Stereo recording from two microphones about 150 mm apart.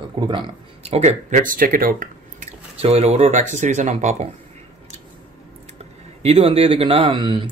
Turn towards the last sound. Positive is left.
turn(degrees=-35)  # may be behind; listen again after turning